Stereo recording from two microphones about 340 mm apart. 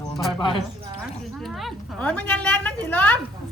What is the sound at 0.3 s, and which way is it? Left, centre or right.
Speech, centre.